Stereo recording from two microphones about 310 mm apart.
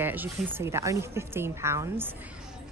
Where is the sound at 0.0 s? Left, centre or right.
Centre.